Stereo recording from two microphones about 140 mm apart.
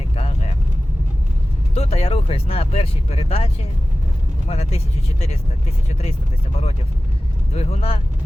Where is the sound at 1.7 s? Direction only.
50° left (ahead or behind).